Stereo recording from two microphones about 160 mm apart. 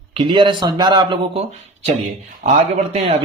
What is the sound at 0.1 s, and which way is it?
Speech, 30° right (ahead or behind).